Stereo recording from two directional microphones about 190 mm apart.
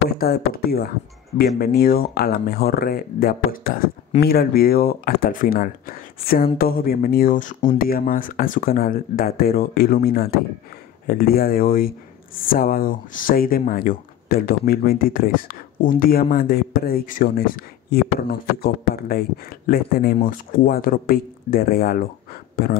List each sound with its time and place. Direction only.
0.2 s speech: 50° left (ahead or behind)